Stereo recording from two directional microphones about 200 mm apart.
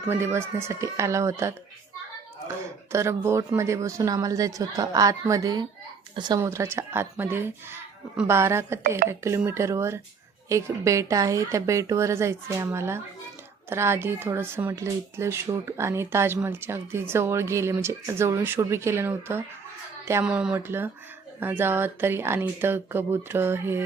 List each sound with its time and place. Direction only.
0.0 s speech: 10° right (ahead or behind)